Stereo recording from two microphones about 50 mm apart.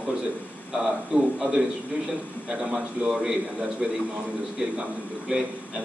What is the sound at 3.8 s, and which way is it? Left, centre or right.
Speech, centre.